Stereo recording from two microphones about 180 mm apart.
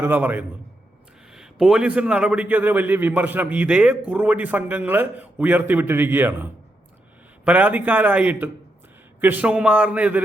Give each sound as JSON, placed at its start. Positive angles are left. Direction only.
{"t": 0.0, "sound": "a man's voice", "side_deg": -10}